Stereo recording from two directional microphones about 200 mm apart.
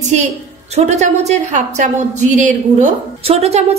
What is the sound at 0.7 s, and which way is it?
A woman's voice, 35° right (ahead or behind).